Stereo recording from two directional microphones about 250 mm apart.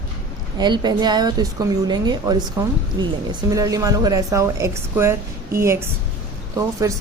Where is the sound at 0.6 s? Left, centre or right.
Centre.